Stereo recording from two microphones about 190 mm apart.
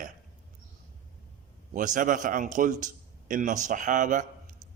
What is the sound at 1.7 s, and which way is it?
A man's voice, 45° right (ahead or behind).